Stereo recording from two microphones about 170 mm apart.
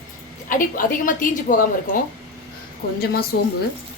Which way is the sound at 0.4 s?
55° left (ahead or behind).